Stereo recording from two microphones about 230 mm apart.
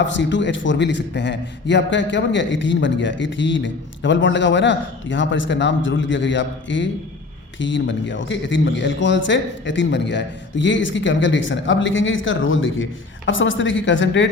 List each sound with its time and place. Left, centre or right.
0.0 s a man's voice: left